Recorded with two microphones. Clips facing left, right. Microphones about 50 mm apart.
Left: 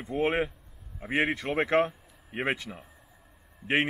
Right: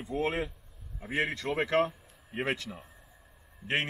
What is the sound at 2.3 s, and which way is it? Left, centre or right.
Speech, centre.